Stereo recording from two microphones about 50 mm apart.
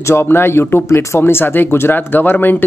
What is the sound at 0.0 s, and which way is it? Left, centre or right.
Speech, left.